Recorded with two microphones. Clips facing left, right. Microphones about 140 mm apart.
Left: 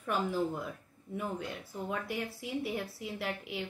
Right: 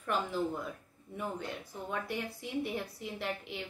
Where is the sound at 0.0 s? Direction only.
5° left (ahead or behind).